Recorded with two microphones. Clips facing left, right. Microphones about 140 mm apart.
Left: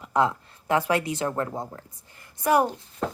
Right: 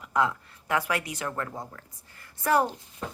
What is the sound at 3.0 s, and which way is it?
Horse, 90° left.